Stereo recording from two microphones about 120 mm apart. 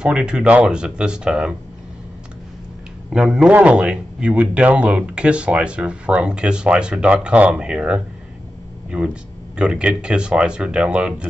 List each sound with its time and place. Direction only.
0.0 s a man's voice: 10° right (ahead or behind)
3.1 s a man's voice: 5° right (ahead or behind)
9.6 s a man's voice: 10° right (ahead or behind)